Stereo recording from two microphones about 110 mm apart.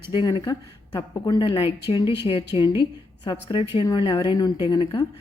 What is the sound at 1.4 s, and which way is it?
Speech, 55° left (ahead or behind).